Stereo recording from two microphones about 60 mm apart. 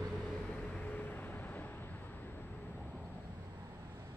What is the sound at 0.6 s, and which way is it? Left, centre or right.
Vehicle, left.